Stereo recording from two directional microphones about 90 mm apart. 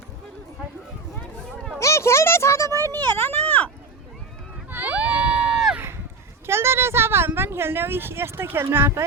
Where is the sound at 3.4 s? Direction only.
15° left (ahead or behind).